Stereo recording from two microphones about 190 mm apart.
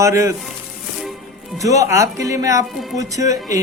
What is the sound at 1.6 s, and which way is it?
Speech, 15° right (ahead or behind).